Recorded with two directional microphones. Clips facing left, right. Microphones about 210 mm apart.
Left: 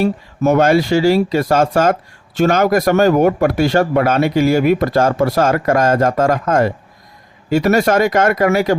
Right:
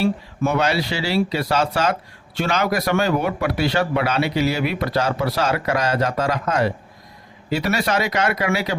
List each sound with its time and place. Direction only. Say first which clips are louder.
0.0 s speech: left 5 dB; 45° left (ahead or behind)